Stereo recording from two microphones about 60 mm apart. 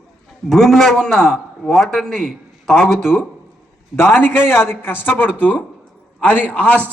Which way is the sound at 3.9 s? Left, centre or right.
Left.